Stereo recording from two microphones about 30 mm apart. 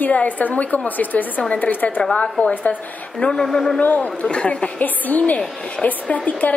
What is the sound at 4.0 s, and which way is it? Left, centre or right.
Speech, left.